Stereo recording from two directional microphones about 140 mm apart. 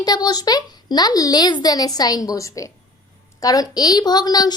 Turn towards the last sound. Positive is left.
turn(degrees=30)  # may be behind; listen again after turning